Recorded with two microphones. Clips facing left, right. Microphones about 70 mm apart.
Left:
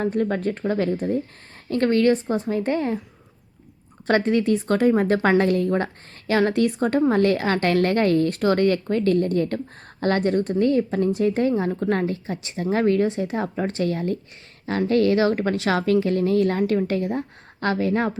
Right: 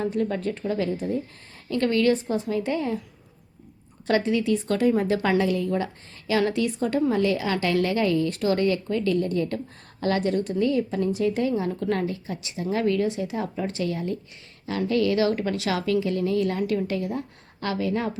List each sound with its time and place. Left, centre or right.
0.0 s a woman's voice: left
4.0 s a woman's voice: left